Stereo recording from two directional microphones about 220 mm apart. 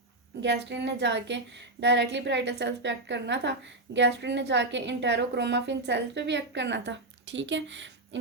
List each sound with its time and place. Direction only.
0.4 s a woman's voice: 50° right (ahead or behind)